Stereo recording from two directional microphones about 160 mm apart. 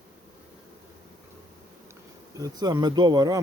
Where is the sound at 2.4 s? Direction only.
25° right (ahead or behind).